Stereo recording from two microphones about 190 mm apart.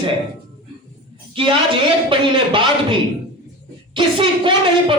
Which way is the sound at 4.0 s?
25° right (ahead or behind).